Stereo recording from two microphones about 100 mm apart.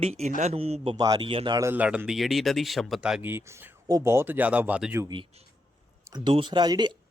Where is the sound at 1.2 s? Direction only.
60° right (ahead or behind).